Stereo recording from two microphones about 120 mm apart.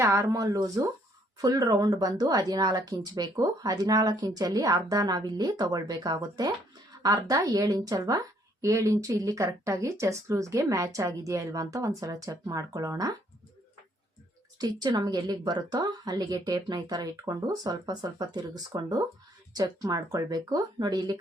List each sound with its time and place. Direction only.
0.0 s a woman's voice: 25° right (ahead or behind)
14.6 s speech: 35° right (ahead or behind)